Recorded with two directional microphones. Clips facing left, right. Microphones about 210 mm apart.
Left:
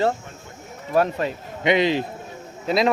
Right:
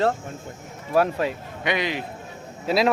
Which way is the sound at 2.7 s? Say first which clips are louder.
Left 1 dB; 5° right (ahead or behind).